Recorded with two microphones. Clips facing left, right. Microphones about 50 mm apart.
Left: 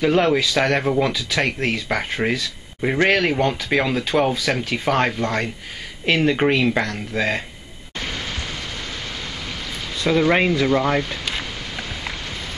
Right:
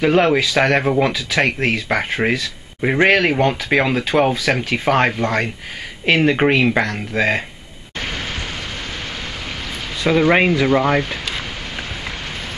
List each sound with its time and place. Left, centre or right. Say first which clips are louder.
0.0 s speech: right 3 dB; right
10.0 s speech: right 3 dB; centre